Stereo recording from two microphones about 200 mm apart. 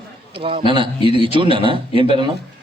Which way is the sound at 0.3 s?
25° right (ahead or behind).